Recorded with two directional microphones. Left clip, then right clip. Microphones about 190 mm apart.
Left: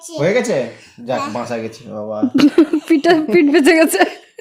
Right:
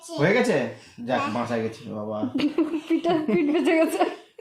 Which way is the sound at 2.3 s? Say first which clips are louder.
Left 14 dB; 60° left (ahead or behind).